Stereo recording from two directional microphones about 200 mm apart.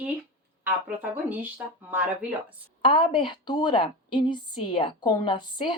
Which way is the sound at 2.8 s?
25° left (ahead or behind).